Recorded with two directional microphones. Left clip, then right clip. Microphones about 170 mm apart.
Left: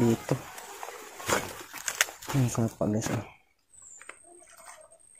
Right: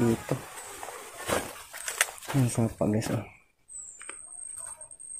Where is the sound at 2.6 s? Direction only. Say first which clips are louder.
Right 3 dB; 10° right (ahead or behind).